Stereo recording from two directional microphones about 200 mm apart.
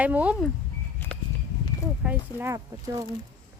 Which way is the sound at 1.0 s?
10° left (ahead or behind).